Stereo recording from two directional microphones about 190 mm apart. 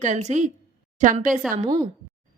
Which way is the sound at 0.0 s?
40° right (ahead or behind).